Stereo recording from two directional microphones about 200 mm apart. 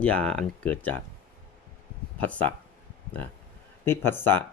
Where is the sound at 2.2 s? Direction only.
5° left (ahead or behind).